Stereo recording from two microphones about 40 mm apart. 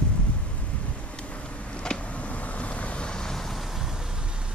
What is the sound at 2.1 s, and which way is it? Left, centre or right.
Vehicle, left.